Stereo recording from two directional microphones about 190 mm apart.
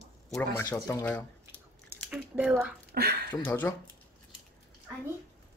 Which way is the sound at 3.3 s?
10° left (ahead or behind).